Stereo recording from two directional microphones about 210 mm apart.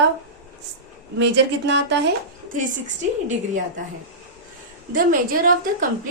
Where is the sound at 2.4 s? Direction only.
40° right (ahead or behind).